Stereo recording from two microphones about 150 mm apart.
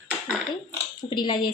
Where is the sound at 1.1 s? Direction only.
30° left (ahead or behind).